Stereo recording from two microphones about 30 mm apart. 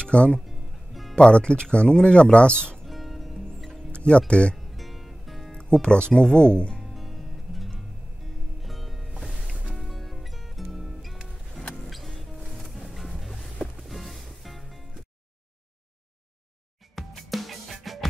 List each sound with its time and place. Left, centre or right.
0.0 s speech: left
0.5 s music: centre
1.1 s speech: left
2.9 s music: centre
3.9 s music: left
4.3 s speech: left
4.6 s music: centre
5.5 s speech: left
6.8 s music: centre
16.9 s music: centre